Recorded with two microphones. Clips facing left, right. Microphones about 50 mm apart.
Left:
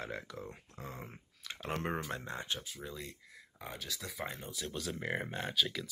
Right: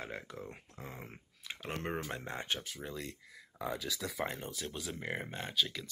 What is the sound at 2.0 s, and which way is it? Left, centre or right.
Speech, right.